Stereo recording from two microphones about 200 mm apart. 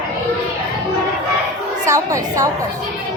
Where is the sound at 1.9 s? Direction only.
15° right (ahead or behind).